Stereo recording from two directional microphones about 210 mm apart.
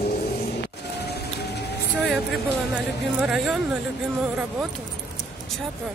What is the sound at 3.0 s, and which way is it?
Speech, centre (ahead or behind).